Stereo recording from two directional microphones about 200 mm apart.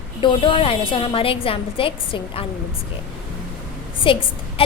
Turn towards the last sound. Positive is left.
turn(degrees=25)  # may be behind; listen again after turning